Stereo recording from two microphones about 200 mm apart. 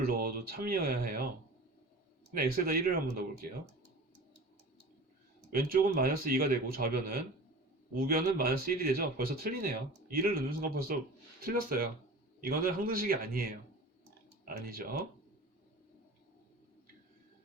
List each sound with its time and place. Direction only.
0.0 s speech: 50° right (ahead or behind)
2.3 s speech: 50° right (ahead or behind)
5.5 s speech: 50° right (ahead or behind)